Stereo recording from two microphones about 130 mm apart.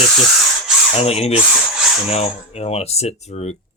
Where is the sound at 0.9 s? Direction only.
50° left (ahead or behind).